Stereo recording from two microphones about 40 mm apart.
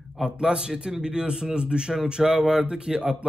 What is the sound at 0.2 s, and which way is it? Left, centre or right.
A man's voice, centre.